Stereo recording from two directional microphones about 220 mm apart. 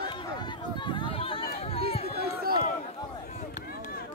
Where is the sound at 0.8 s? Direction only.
20° left (ahead or behind).